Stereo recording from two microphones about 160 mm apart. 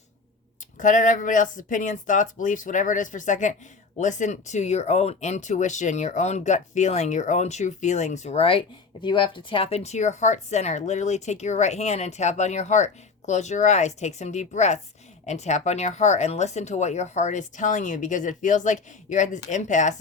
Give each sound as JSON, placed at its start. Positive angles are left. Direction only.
{"t": 0.8, "sound": "speech", "side_deg": 55}